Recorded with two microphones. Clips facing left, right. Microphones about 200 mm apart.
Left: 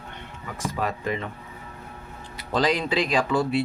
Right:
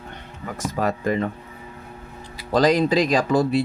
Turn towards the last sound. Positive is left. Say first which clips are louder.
# right 4 dB
turn(degrees=-40)  # may be behind; listen again after turning